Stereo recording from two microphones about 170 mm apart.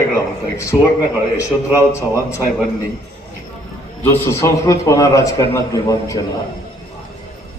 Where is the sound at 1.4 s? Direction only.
15° left (ahead or behind).